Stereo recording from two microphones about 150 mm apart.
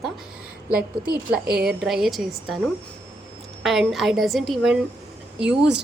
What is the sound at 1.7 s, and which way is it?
A woman's voice, centre (ahead or behind).